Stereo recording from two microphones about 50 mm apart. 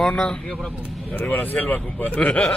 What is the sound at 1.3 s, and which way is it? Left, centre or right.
Speech, left.